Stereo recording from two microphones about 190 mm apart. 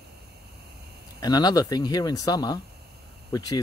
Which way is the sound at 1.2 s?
20° left (ahead or behind).